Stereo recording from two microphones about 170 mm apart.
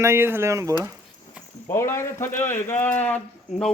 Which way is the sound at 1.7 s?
15° left (ahead or behind).